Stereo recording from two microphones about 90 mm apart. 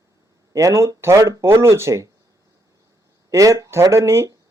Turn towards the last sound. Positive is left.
turn(degrees=-35)  # may be behind; listen again after turning